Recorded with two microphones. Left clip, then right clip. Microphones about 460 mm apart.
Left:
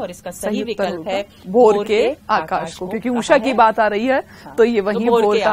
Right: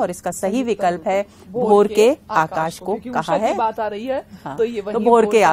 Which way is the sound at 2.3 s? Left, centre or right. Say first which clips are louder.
Even; left.